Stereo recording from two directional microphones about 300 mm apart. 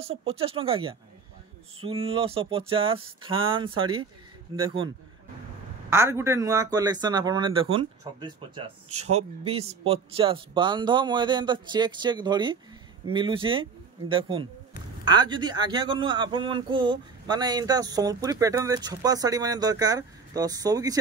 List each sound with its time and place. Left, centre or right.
0.3 s speech: centre
5.9 s speech: centre